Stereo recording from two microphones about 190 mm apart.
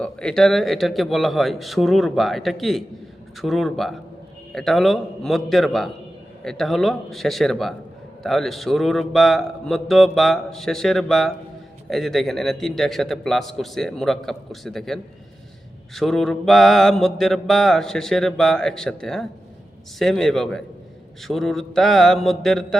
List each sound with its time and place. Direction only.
0.0 s mantra: 5° left (ahead or behind)